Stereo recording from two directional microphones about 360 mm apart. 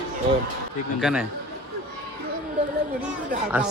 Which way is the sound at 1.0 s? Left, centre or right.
Centre.